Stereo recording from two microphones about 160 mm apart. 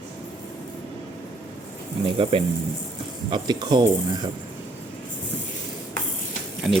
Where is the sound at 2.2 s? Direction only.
35° right (ahead or behind).